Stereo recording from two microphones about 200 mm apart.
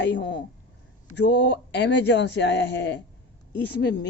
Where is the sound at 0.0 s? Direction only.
60° left (ahead or behind).